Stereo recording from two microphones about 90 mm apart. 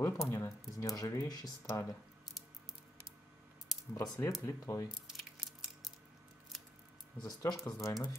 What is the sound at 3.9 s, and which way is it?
Speech, 40° left (ahead or behind).